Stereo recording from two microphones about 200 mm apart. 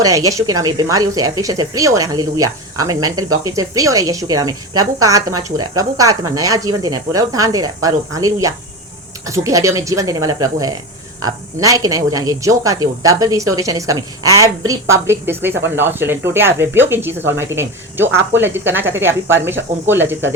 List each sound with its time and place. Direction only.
0.0 s speech: 15° right (ahead or behind)